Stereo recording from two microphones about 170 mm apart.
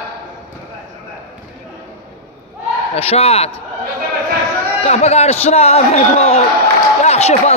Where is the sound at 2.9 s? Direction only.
35° left (ahead or behind).